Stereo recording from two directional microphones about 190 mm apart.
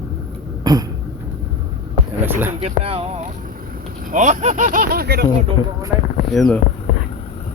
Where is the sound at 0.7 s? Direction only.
20° right (ahead or behind).